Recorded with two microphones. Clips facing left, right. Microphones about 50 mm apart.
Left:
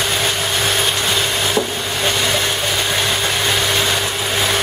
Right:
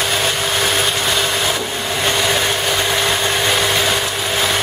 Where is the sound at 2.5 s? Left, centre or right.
Centre.